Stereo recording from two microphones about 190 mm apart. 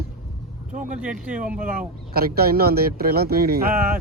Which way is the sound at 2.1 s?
55° right (ahead or behind).